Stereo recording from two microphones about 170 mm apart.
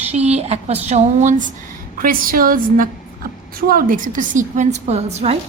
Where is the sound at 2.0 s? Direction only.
55° right (ahead or behind).